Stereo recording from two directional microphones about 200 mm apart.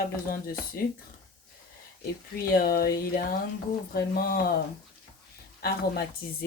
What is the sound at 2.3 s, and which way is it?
Speech, 50° left (ahead or behind).